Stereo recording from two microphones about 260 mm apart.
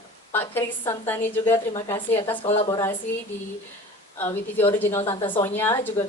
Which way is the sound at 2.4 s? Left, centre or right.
Left.